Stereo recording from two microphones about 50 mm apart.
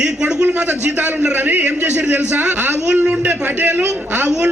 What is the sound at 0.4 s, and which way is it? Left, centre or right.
A man's voice, right.